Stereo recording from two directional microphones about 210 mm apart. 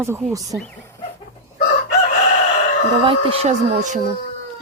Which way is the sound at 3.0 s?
25° right (ahead or behind).